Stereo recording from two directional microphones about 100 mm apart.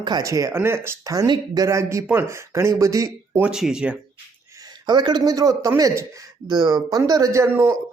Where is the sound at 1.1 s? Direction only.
35° right (ahead or behind).